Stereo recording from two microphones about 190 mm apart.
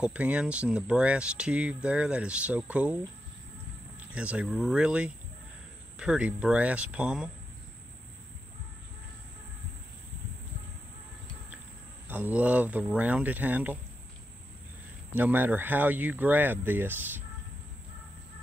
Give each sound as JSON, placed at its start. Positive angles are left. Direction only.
{"t": 0.0, "sound": "speech", "side_deg": -5}
{"t": 4.1, "sound": "speech", "side_deg": -5}
{"t": 12.1, "sound": "speech", "side_deg": -10}
{"t": 15.1, "sound": "speech", "side_deg": -10}